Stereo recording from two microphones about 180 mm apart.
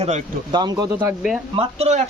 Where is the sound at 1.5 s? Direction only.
35° right (ahead or behind).